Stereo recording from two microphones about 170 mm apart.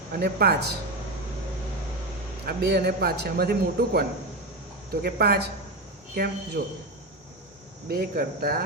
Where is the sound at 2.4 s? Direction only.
70° right (ahead or behind).